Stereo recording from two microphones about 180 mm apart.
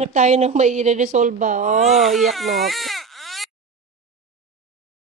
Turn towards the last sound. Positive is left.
turn(degrees=0)  # may be behind; listen again after turning